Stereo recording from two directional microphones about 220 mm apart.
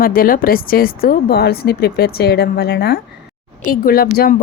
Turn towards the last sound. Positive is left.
turn(degrees=40)  # may be behind; listen again after turning